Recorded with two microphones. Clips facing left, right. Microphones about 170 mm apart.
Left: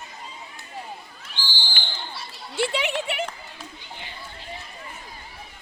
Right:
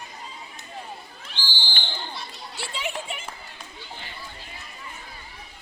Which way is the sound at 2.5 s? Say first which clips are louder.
Left 8 dB; 70° left (ahead or behind).